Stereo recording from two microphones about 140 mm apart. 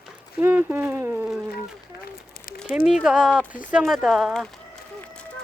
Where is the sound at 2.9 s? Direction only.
5° right (ahead or behind).